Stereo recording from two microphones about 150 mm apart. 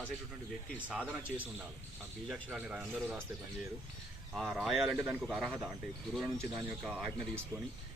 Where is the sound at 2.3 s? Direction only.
5° right (ahead or behind).